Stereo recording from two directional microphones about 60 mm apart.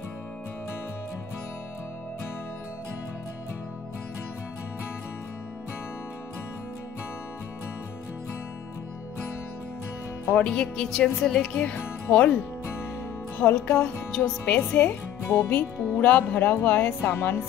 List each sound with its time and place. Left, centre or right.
10.3 s speech: centre
11.5 s speech: left
13.4 s speech: left
14.4 s speech: left